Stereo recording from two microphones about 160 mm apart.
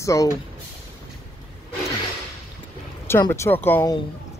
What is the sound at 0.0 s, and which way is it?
Speech, 20° left (ahead or behind).